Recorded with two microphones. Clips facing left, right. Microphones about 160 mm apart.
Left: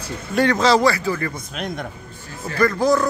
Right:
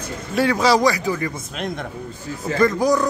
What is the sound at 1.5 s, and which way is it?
Speech, centre (ahead or behind).